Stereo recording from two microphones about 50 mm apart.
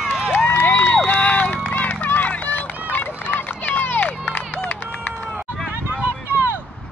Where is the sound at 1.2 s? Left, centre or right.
Left.